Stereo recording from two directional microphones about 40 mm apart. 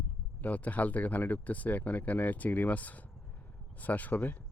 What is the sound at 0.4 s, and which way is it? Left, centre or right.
Speech, left.